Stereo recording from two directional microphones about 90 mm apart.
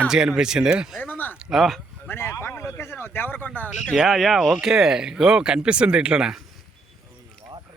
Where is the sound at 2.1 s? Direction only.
25° left (ahead or behind).